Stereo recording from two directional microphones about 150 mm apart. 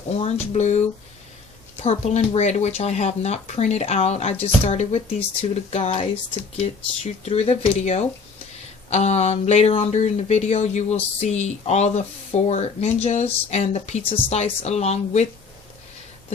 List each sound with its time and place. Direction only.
0.2 s speech: 45° left (ahead or behind)